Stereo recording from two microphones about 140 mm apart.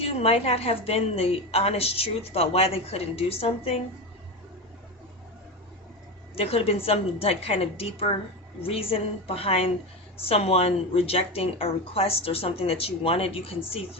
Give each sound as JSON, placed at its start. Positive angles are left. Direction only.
{"t": 0.0, "sound": "a woman's voice", "side_deg": 45}
{"t": 6.3, "sound": "a woman's voice", "side_deg": 45}